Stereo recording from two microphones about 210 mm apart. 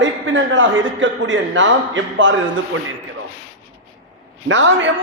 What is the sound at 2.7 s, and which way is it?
Speech, 75° right (ahead or behind).